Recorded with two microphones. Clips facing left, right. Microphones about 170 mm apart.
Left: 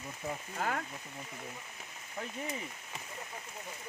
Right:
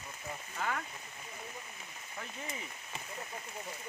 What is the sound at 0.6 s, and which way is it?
Speech, 40° left (ahead or behind).